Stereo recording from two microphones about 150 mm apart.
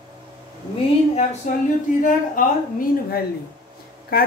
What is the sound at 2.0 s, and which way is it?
Speech, 60° left (ahead or behind).